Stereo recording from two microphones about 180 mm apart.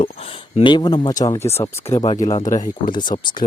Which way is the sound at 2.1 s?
40° left (ahead or behind).